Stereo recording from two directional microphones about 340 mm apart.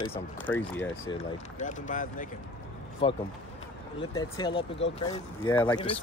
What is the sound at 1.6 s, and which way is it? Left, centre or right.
Speech, left.